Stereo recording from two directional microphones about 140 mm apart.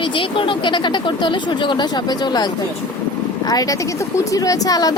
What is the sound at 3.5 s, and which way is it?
A woman's voice, 25° left (ahead or behind).